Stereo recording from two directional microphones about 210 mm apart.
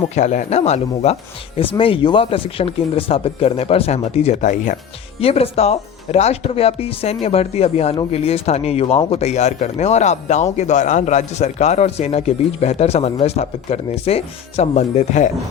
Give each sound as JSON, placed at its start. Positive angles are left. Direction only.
{"t": 0.2, "sound": "speech", "side_deg": 35}